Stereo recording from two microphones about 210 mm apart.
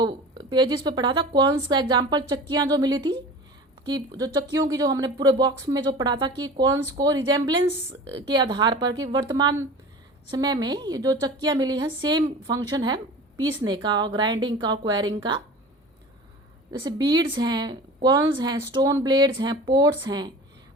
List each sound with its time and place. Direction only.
0.0 s a woman's voice: 20° right (ahead or behind)
16.7 s a woman's voice: 20° right (ahead or behind)